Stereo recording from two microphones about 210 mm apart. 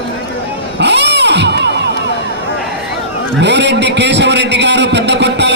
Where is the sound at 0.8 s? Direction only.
55° right (ahead or behind).